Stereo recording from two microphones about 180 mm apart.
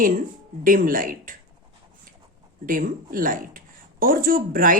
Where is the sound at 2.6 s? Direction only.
50° right (ahead or behind).